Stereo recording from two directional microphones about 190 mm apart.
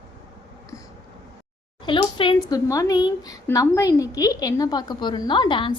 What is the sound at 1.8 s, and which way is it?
A woman's voice, 25° left (ahead or behind).